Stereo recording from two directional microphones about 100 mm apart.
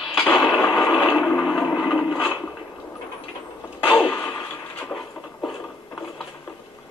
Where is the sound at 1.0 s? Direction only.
5° right (ahead or behind).